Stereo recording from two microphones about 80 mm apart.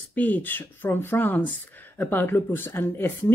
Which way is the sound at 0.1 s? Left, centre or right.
Left.